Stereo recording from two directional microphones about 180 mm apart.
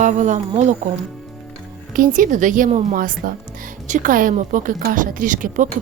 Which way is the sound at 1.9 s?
50° right (ahead or behind).